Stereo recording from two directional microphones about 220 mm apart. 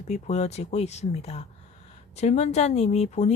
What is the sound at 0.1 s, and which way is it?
Speech, 30° left (ahead or behind).